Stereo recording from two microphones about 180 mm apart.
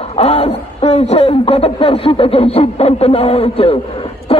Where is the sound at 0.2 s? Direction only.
35° left (ahead or behind).